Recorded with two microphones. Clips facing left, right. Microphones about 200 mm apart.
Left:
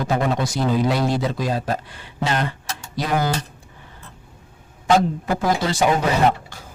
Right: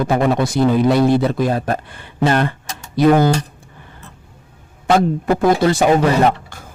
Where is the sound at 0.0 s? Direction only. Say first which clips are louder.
Right 5 dB; 55° right (ahead or behind).